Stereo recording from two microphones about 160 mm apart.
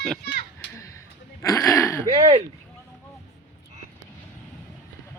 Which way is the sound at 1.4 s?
20° left (ahead or behind).